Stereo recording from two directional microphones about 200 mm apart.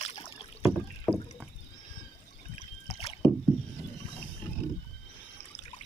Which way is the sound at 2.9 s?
30° left (ahead or behind).